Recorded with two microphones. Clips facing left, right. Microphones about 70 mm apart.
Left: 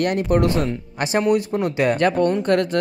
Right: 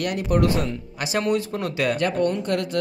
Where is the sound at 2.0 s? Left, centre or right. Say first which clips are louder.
Left 4 dB; left.